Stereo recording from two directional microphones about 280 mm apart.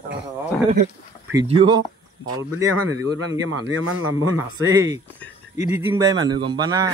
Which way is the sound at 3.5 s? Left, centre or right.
Right.